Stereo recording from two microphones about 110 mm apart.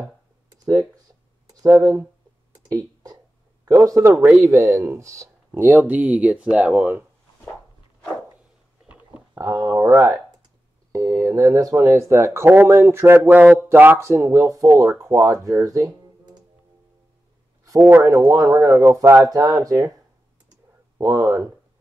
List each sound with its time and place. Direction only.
1.5 s speech: 30° right (ahead or behind)
2.5 s a sound: 35° right (ahead or behind)
3.8 s speech: 30° right (ahead or behind)
9.4 s speech: 25° right (ahead or behind)
15.4 s music: 30° right (ahead or behind)
17.7 s speech: 20° right (ahead or behind)
21.0 s speech: 30° right (ahead or behind)